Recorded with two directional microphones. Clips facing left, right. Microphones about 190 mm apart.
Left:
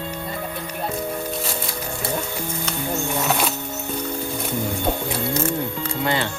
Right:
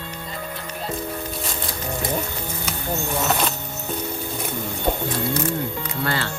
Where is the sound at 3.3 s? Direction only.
5° left (ahead or behind).